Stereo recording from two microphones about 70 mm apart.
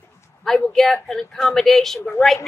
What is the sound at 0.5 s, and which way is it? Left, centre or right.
A woman's voice, centre.